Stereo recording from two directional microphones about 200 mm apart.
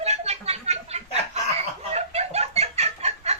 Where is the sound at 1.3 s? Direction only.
30° right (ahead or behind).